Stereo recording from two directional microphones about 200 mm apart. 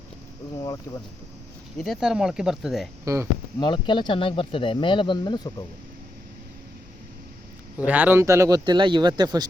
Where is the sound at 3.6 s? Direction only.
25° left (ahead or behind).